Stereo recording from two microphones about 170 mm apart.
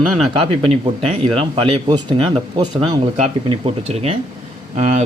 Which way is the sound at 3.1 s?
35° right (ahead or behind).